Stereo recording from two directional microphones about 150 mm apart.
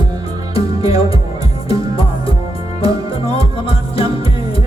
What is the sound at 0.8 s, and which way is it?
Music, 40° left (ahead or behind).